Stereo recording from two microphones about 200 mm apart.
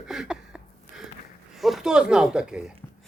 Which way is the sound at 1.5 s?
Centre (ahead or behind).